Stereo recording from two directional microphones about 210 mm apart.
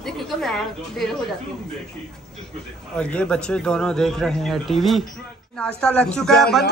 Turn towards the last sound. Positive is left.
turn(degrees=0)  # may be behind; listen again after turning